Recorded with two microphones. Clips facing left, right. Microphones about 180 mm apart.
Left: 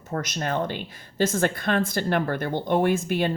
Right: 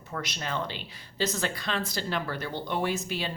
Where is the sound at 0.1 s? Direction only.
45° left (ahead or behind).